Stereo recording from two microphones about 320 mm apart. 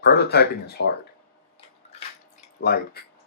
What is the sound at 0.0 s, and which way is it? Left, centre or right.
Speech, left.